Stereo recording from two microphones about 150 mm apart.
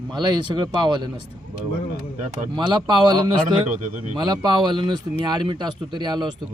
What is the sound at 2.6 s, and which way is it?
Speech, 30° right (ahead or behind).